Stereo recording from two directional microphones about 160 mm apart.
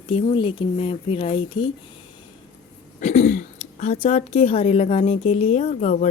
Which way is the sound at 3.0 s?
50° left (ahead or behind).